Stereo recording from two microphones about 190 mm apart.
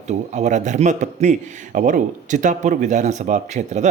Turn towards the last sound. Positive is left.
turn(degrees=-40)  # may be behind; listen again after turning